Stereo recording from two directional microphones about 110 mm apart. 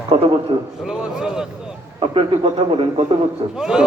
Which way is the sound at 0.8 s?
5° right (ahead or behind).